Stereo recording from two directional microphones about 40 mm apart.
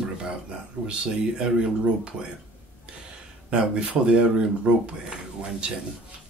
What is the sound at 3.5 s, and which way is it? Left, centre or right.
Speech, right.